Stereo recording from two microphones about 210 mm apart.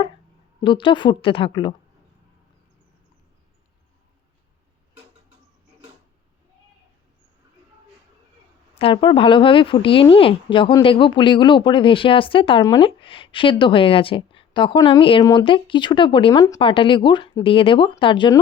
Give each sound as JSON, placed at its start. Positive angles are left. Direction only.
{"t": 0.6, "sound": "a woman's voice", "side_deg": 25}
{"t": 8.8, "sound": "a woman's voice", "side_deg": 25}